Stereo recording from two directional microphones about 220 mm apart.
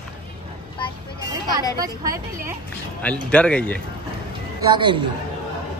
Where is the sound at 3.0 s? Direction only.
5° left (ahead or behind).